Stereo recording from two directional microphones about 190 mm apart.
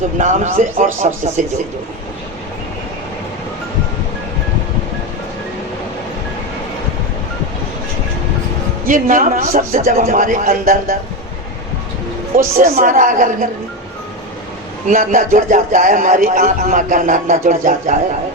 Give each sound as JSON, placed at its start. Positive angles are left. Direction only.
{"t": 0.2, "sound": "a man's voice", "side_deg": -40}
{"t": 8.9, "sound": "speech", "side_deg": -45}
{"t": 12.4, "sound": "speech", "side_deg": -50}
{"t": 14.8, "sound": "speech", "side_deg": -45}